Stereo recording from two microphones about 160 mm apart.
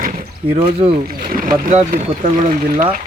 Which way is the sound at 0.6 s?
35° right (ahead or behind).